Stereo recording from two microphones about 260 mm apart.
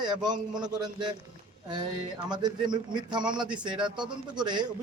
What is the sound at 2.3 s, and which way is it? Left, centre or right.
A man's voice, centre.